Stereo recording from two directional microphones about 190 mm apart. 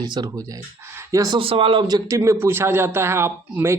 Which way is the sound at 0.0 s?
20° right (ahead or behind).